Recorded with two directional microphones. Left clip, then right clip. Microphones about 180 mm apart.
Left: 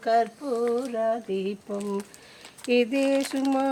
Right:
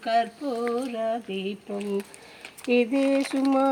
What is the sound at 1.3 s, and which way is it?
Speech, 75° left (ahead or behind).